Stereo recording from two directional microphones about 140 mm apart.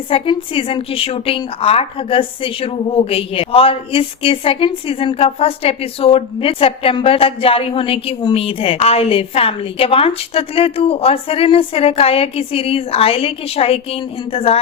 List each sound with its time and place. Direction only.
0.1 s a woman's voice: 40° left (ahead or behind)